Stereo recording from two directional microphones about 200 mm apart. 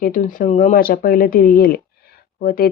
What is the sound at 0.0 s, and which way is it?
Speech, 40° left (ahead or behind).